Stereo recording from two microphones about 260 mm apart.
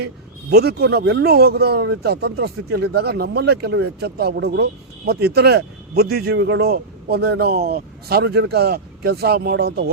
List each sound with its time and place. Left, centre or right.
0.5 s speech: right